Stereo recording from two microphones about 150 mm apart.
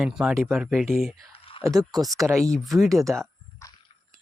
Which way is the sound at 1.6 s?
25° right (ahead or behind).